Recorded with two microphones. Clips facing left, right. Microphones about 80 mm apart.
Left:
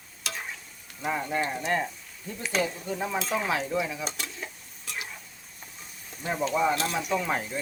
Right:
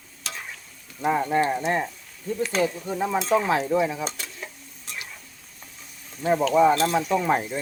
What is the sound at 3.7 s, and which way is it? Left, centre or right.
Stir, right.